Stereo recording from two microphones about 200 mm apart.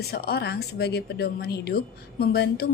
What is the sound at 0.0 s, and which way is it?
A woman's voice, 50° left (ahead or behind).